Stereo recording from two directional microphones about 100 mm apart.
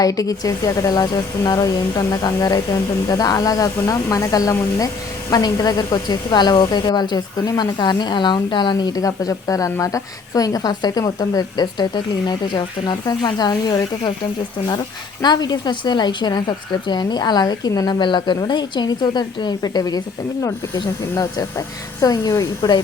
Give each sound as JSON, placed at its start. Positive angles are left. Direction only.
{"t": 0.0, "sound": "a woman's voice", "side_deg": 35}
{"t": 15.2, "sound": "a woman's voice", "side_deg": 45}
{"t": 22.0, "sound": "speech", "side_deg": 35}